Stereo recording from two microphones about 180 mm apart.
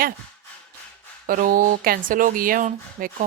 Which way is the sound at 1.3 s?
50° right (ahead or behind).